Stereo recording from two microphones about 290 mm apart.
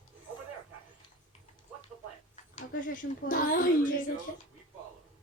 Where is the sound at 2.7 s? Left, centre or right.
Left.